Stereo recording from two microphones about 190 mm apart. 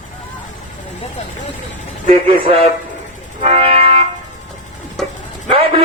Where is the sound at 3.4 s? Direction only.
30° right (ahead or behind).